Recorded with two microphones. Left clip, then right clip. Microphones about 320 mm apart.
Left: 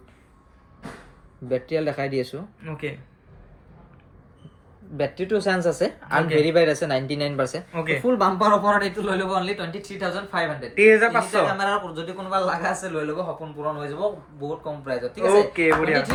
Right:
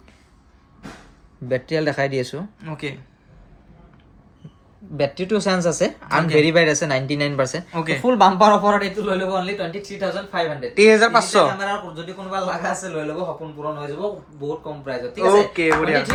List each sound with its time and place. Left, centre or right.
1.5 s speech: right
2.6 s speech: centre
4.9 s speech: right
7.7 s speech: centre
8.0 s speech: right; by 12.9 s centre
14.4 s speech: centre